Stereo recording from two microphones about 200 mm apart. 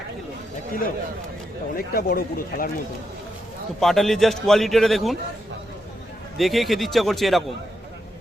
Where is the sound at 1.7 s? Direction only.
45° left (ahead or behind).